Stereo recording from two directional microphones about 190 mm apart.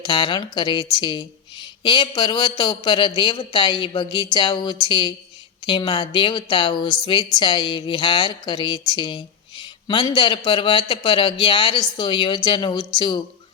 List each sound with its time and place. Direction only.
0.0 s a woman's voice: 25° left (ahead or behind)